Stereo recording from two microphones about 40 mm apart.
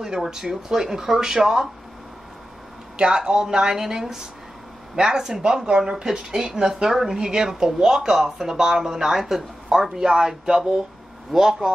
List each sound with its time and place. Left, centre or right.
0.0 s speech: centre
3.0 s speech: right